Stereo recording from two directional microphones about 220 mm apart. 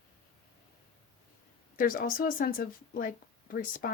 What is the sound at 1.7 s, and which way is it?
Speech, 40° left (ahead or behind).